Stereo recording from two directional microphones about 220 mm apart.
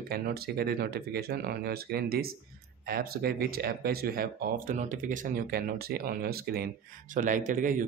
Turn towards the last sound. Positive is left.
turn(degrees=-35)  # may be behind; listen again after turning